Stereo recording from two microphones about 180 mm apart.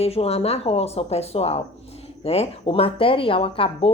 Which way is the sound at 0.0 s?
35° left (ahead or behind).